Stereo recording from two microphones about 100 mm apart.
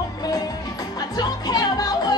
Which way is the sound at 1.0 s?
40° left (ahead or behind).